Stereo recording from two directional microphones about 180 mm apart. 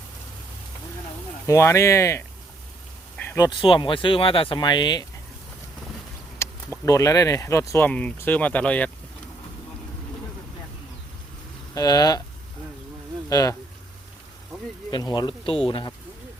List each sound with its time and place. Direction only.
1.5 s speech: 15° left (ahead or behind)
3.3 s speech: 25° left (ahead or behind)
6.4 s speech: 15° left (ahead or behind)
11.7 s speech: 20° left (ahead or behind)
13.3 s speech: 20° left (ahead or behind)
14.8 s speech: 25° left (ahead or behind)